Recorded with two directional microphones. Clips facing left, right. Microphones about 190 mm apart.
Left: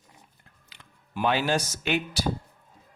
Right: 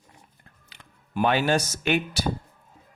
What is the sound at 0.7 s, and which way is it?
Speech, 50° right (ahead or behind).